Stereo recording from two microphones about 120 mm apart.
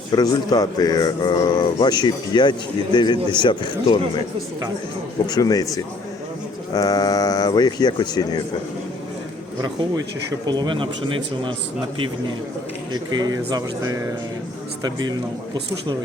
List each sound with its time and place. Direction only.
0.1 s a man's voice: 35° left (ahead or behind)
5.2 s a man's voice: 35° left (ahead or behind)
10.4 s a man's voice: 35° right (ahead or behind)
12.9 s a man's voice: 35° right (ahead or behind)